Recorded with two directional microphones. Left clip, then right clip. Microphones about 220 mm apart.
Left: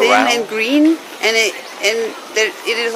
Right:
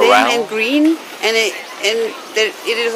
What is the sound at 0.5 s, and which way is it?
A woman's voice, 10° left (ahead or behind).